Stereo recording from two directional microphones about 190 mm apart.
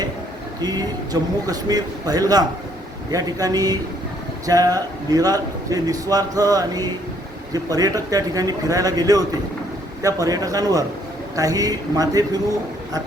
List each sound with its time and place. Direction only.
0.6 s a man's voice: 20° right (ahead or behind)